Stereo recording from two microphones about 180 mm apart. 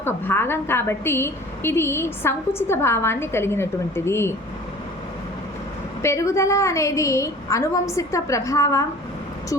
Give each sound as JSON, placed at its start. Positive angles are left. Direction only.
{"t": 0.0, "sound": "a woman's voice", "side_deg": 10}
{"t": 6.0, "sound": "a woman's voice", "side_deg": 15}